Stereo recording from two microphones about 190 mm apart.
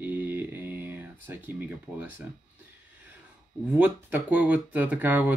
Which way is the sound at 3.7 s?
10° right (ahead or behind).